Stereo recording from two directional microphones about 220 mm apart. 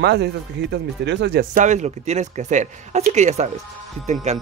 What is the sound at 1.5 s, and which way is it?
Speech, 35° right (ahead or behind).